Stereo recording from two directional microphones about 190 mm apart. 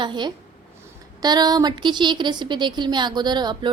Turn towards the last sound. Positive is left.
turn(degrees=-25)  # may be behind; listen again after turning